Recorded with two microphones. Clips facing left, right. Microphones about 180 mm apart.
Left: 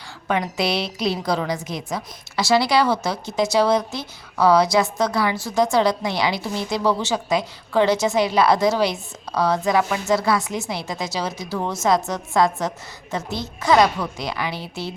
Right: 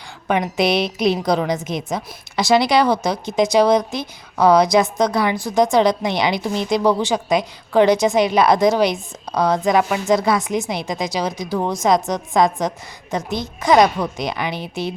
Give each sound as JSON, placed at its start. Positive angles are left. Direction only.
{"t": 0.3, "sound": "a woman's voice", "side_deg": -20}